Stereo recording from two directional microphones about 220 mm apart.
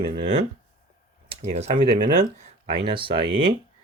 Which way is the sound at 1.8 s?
40° right (ahead or behind).